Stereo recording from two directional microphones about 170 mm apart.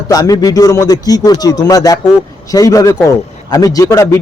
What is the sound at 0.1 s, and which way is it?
A man's voice, 20° left (ahead or behind).